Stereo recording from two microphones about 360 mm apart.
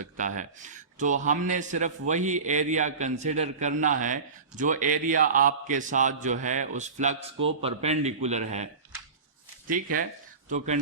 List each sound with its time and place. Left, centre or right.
0.0 s a man's voice: right